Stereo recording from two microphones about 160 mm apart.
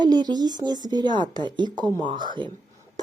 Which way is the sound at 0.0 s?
25° right (ahead or behind).